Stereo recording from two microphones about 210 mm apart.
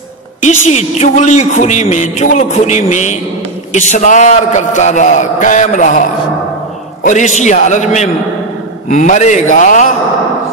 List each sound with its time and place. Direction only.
0.5 s a man's voice: 30° left (ahead or behind)